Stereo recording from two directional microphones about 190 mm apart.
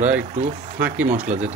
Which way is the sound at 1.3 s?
35° right (ahead or behind).